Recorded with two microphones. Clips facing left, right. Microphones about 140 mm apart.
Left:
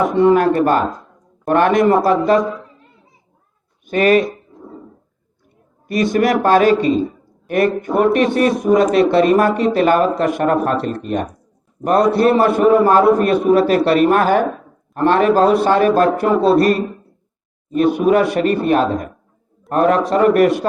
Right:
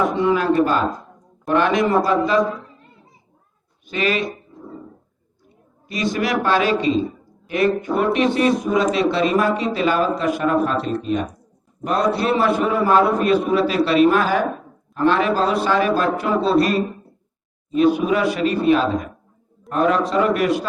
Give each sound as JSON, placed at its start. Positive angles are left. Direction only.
{"t": 0.1, "sound": "a man's voice", "side_deg": 50}
{"t": 3.8, "sound": "speech", "side_deg": 50}
{"t": 5.9, "sound": "a man's voice", "side_deg": 55}
{"t": 17.7, "sound": "speech", "side_deg": 50}